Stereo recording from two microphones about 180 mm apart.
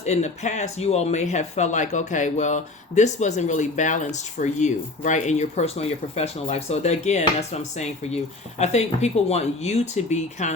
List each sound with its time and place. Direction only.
0.0 s speech: 40° left (ahead or behind)